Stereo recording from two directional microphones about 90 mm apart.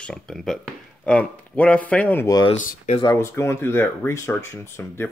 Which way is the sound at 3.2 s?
30° left (ahead or behind).